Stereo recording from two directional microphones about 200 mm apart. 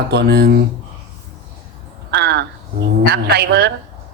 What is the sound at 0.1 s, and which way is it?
Speech, 55° right (ahead or behind).